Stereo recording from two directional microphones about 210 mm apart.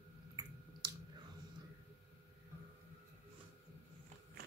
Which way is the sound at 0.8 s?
20° right (ahead or behind).